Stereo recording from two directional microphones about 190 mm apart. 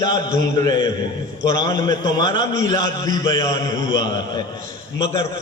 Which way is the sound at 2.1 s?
20° left (ahead or behind).